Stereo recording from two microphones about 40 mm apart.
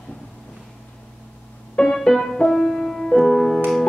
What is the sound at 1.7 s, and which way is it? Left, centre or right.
Keyboard, left.